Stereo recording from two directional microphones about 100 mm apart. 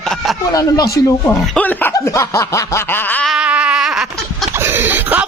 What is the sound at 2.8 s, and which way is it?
Speech, 20° left (ahead or behind).